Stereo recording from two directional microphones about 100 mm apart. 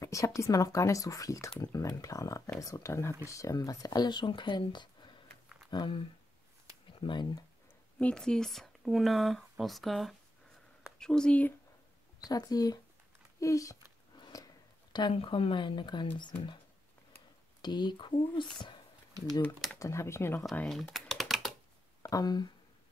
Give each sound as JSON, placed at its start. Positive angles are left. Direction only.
{"t": 0.0, "sound": "speech", "side_deg": 30}
{"t": 8.0, "sound": "speech", "side_deg": 10}
{"t": 12.2, "sound": "speech", "side_deg": 40}
{"t": 14.1, "sound": "a sound", "side_deg": 40}
{"t": 15.1, "sound": "speech", "side_deg": 65}
{"t": 17.6, "sound": "speech", "side_deg": 45}
{"t": 19.8, "sound": "speech", "side_deg": 30}
{"t": 20.6, "sound": "typing", "side_deg": 5}
{"t": 22.0, "sound": "speech", "side_deg": 40}